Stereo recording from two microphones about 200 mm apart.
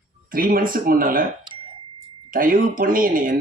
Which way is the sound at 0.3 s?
45° right (ahead or behind).